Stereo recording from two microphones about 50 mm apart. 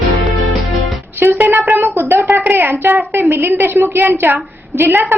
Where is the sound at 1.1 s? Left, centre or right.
Right.